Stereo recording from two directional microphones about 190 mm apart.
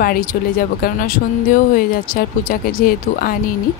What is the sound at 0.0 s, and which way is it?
Speech, 50° left (ahead or behind).